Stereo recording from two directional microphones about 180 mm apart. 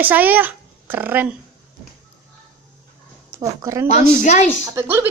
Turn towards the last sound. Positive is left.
turn(degrees=-15)  # may be behind; listen again after turning